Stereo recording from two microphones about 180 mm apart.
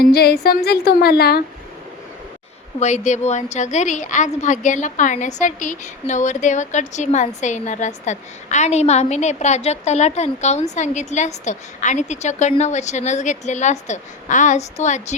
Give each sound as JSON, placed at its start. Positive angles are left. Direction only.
{"t": 0.0, "sound": "speech", "side_deg": 60}
{"t": 2.8, "sound": "a woman's voice", "side_deg": 40}